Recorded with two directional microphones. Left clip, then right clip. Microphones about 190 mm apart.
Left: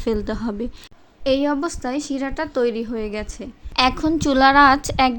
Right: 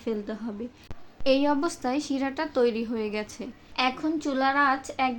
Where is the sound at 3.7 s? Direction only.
45° left (ahead or behind).